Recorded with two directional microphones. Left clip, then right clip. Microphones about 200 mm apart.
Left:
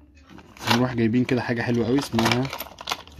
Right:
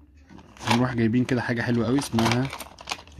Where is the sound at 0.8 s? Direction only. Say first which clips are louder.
Left 1 dB; 15° right (ahead or behind).